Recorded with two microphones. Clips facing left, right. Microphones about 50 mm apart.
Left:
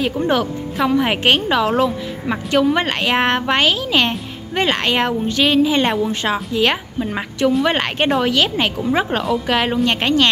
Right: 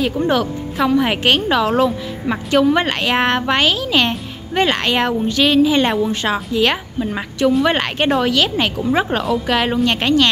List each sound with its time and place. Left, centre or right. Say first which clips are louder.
0.0 s a woman's voice: right 1 dB; centre
5.9 s a woman's voice: right 1 dB; centre
7.1 s speech: right 1 dB; left
7.5 s speech: right 2 dB; centre
8.2 s a woman's voice: even; centre